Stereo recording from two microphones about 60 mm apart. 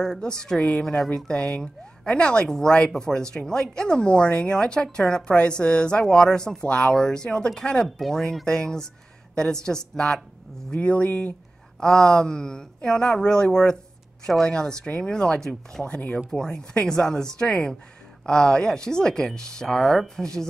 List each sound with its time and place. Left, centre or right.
0.0 s speech: centre
0.8 s a woman's voice: centre
10.7 s speech: left
11.8 s speech: centre